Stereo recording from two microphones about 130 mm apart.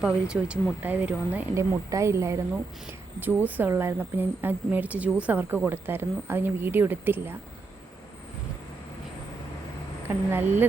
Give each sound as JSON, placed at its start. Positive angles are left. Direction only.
{"t": 0.0, "sound": "a woman's voice", "side_deg": -5}
{"t": 1.7, "sound": "a woman's voice", "side_deg": -25}
{"t": 10.2, "sound": "a woman's voice", "side_deg": -15}